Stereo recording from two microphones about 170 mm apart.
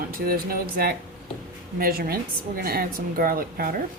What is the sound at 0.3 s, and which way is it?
Speech, 60° right (ahead or behind).